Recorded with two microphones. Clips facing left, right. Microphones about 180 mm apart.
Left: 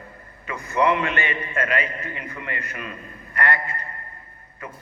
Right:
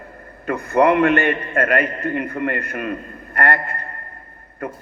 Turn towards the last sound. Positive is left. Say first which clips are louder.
# right 9 dB
turn(degrees=-55)  # may be behind; listen again after turning